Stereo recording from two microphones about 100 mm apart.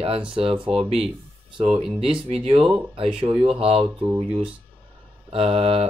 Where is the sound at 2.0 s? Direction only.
75° right (ahead or behind).